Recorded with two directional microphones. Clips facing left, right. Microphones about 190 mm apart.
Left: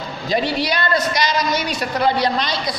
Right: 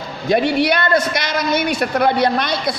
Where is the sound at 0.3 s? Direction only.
60° right (ahead or behind).